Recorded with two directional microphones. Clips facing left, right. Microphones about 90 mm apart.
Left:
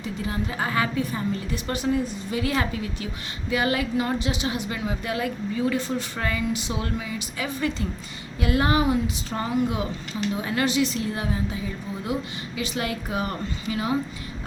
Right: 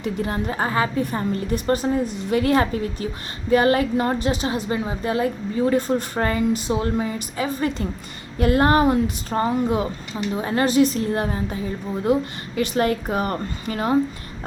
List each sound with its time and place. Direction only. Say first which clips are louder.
0.0 s a woman's voice: right 5 dB; 50° right (ahead or behind); by 1.0 s 35° right (ahead or behind)
1.1 s a woman's voice: right 4 dB; 45° right (ahead or behind)
2.1 s a woman's voice: right 7 dB; 50° right (ahead or behind)